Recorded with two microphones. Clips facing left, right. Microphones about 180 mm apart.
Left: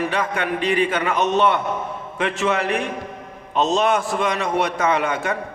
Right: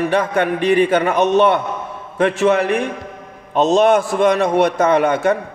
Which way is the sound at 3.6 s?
55° right (ahead or behind).